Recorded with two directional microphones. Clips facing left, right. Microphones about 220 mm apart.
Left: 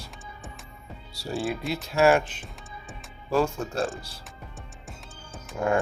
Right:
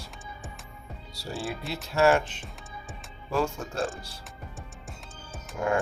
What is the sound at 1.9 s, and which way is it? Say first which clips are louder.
Music: left 2 dB; 10° left (ahead or behind).